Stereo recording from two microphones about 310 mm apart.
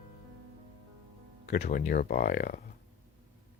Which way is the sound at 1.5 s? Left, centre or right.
Left.